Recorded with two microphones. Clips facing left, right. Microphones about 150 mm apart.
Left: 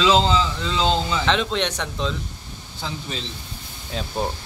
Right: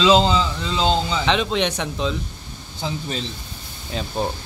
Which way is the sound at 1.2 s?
5° right (ahead or behind).